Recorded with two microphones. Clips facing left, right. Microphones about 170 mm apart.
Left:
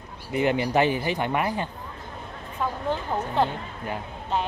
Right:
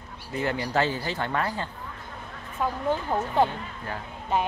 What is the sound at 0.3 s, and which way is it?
Speech, 20° left (ahead or behind).